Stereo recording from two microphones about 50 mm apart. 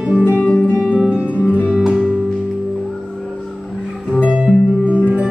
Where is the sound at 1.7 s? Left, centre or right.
Centre.